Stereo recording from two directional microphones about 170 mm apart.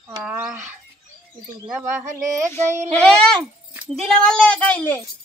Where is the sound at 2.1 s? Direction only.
20° right (ahead or behind).